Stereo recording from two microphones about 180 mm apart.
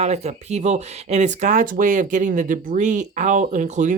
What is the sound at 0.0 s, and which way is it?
Speech, 35° right (ahead or behind).